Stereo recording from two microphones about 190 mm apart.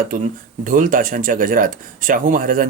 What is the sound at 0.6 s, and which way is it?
Speech, 45° right (ahead or behind).